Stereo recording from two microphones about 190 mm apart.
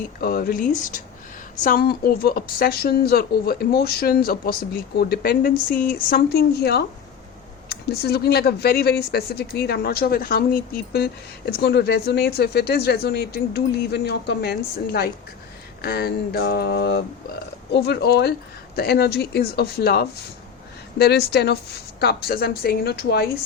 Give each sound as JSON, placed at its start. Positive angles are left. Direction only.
{"t": 0.2, "sound": "a woman's voice", "side_deg": 50}